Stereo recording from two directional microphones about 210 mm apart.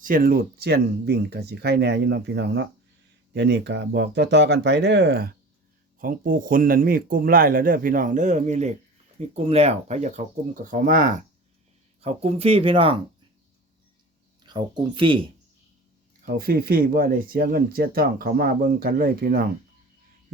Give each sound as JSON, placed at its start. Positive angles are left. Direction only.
{"t": 0.0, "sound": "speech", "side_deg": -40}
{"t": 6.0, "sound": "a man's voice", "side_deg": -40}
{"t": 12.0, "sound": "speech", "side_deg": -30}
{"t": 14.4, "sound": "speech", "side_deg": -20}
{"t": 16.2, "sound": "speech", "side_deg": -45}